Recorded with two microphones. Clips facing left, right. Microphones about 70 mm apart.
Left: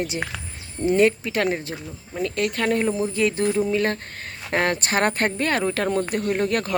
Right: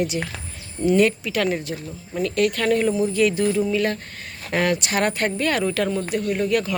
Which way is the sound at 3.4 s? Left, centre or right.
Left.